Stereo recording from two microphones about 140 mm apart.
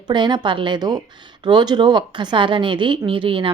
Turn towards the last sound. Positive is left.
turn(degrees=-40)  # may be behind; listen again after turning